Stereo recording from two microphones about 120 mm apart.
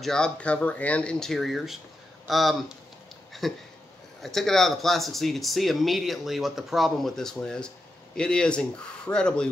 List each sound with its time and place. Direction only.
0.0 s speech: 5° left (ahead or behind)